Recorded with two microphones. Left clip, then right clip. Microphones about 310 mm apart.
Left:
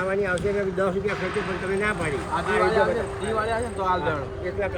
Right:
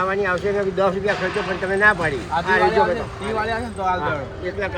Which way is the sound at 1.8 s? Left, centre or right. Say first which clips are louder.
Right 11 dB; centre.